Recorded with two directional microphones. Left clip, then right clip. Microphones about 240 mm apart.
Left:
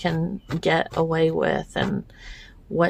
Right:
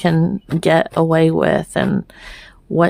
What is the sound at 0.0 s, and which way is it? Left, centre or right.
Speech, right.